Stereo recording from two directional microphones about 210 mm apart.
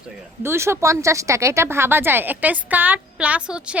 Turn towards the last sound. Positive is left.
turn(degrees=-5)  # may be behind; listen again after turning